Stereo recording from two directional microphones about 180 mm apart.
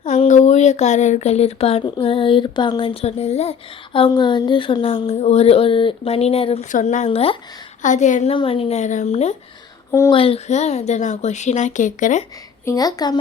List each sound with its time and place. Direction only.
0.0 s speech: 40° left (ahead or behind)
6.7 s a woman's voice: 45° left (ahead or behind)
12.6 s speech: 20° left (ahead or behind)